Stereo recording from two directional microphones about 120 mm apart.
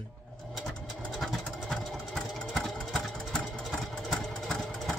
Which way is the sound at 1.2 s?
Centre (ahead or behind).